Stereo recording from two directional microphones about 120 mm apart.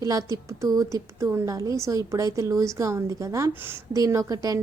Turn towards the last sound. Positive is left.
turn(degrees=-30)  # may be behind; listen again after turning